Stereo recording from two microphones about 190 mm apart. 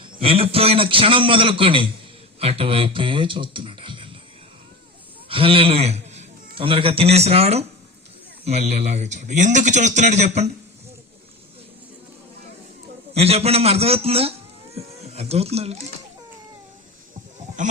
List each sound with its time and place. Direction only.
0.0 s a man's voice: 30° right (ahead or behind)
5.3 s a man's voice: 30° right (ahead or behind)
13.1 s a man's voice: 35° right (ahead or behind)
17.6 s a sound: 40° right (ahead or behind)